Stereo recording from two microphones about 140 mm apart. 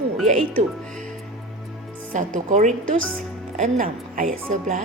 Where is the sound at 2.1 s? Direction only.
70° right (ahead or behind).